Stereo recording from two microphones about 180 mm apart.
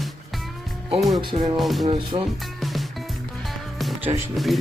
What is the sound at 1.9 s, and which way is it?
Speech, 30° right (ahead or behind).